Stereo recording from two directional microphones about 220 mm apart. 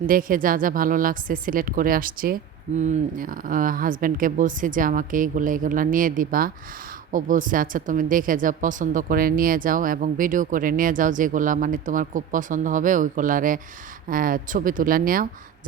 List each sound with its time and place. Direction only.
0.1 s speech: 40° right (ahead or behind)